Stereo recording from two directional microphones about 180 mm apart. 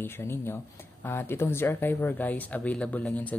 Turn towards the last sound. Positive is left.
turn(degrees=10)  # may be behind; listen again after turning